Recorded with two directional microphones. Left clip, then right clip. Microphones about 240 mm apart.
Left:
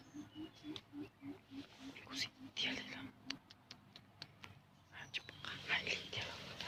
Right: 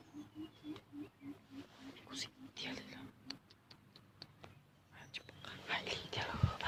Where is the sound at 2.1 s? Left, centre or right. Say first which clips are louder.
Left 3 dB; centre.